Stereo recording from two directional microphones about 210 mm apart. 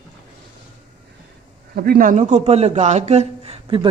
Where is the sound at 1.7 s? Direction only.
45° right (ahead or behind).